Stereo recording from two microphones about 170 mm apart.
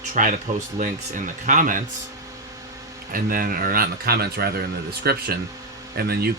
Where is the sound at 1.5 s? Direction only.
50° right (ahead or behind).